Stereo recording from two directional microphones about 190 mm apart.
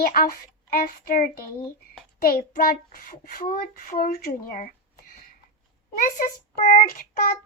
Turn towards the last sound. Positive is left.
turn(degrees=50)  # may be behind; listen again after turning